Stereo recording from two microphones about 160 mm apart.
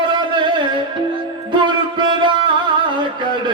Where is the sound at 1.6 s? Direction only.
30° right (ahead or behind).